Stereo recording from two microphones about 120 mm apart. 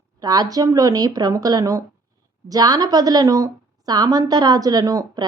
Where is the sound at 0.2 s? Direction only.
30° right (ahead or behind).